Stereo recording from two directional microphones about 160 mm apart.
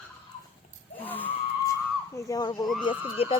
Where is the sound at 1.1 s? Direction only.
10° left (ahead or behind).